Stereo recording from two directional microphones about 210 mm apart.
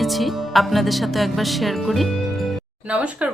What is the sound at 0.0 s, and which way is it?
Speech, centre (ahead or behind).